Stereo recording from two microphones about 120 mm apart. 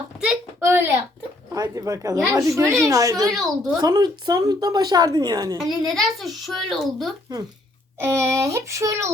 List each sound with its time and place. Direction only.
0.6 s a sound: 20° right (ahead or behind)
1.5 s speech: 30° right (ahead or behind)
3.3 s a child's voice: centre (ahead or behind)
3.8 s speech: 35° right (ahead or behind)
5.5 s a child's voice: 5° right (ahead or behind)
7.9 s speech: 20° right (ahead or behind)